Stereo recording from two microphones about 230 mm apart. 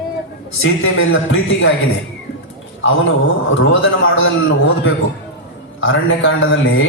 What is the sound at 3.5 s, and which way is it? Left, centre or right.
Speech, left.